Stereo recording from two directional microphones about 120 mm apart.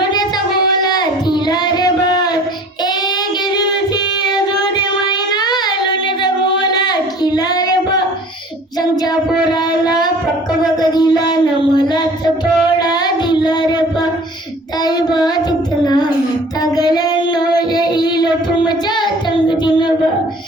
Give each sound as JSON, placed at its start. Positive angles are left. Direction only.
{"t": 0.8, "sound": "a sound", "side_deg": 35}
{"t": 4.2, "sound": "child singing", "side_deg": 35}
{"t": 9.5, "sound": "a sound", "side_deg": 35}
{"t": 12.8, "sound": "child singing", "side_deg": 35}
{"t": 14.8, "sound": "child singing", "side_deg": 35}
{"t": 16.7, "sound": "female singing", "side_deg": 35}